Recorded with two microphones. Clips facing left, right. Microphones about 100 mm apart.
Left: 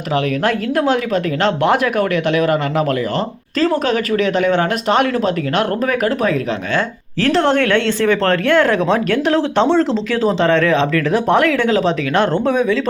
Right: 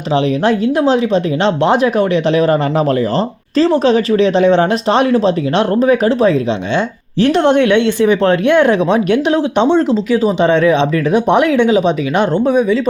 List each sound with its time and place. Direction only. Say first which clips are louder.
0.4 s speech: right 4 dB; 25° right (ahead or behind)